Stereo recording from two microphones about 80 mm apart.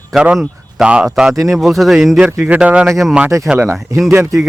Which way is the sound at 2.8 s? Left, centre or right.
Centre.